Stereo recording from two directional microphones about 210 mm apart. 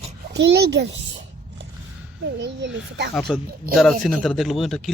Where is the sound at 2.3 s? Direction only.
60° right (ahead or behind).